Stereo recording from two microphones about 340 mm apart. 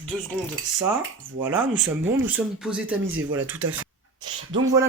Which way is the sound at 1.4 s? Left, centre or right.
Centre.